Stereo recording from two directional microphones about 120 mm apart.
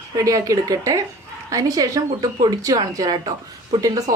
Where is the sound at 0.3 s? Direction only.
30° right (ahead or behind).